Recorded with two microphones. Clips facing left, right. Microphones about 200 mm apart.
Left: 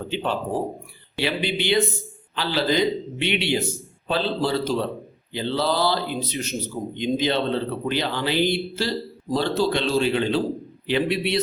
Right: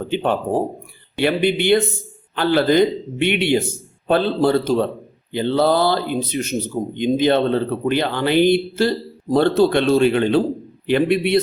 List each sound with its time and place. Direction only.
0.1 s a man's voice: 55° right (ahead or behind)